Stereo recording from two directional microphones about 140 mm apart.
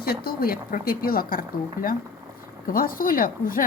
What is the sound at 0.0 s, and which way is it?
Speech, 90° left.